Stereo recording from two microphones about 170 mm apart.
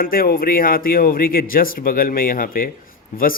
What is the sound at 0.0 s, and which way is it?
A man's voice, 60° left (ahead or behind).